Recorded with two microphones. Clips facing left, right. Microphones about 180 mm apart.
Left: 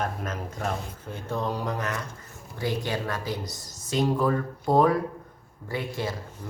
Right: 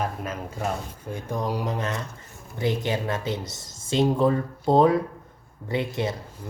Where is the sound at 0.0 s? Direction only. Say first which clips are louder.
Right 1 dB; 5° right (ahead or behind).